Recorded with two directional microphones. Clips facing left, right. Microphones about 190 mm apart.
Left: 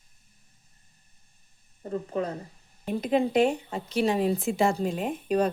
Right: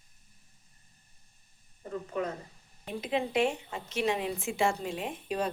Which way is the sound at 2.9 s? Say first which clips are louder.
Left 6 dB; 45° left (ahead or behind).